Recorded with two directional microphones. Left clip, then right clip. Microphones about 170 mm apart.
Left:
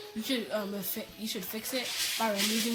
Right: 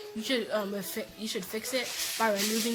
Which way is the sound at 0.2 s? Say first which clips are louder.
Right 3 dB; 10° right (ahead or behind).